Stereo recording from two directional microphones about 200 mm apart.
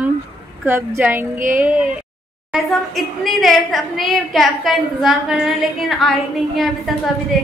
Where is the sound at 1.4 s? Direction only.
40° right (ahead or behind).